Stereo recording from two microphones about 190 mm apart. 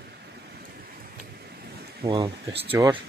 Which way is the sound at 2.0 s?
25° right (ahead or behind).